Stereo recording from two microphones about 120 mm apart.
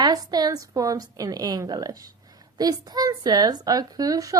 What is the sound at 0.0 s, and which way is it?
A woman's voice, 35° right (ahead or behind).